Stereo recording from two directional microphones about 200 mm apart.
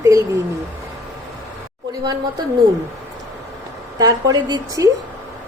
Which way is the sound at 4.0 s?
20° right (ahead or behind).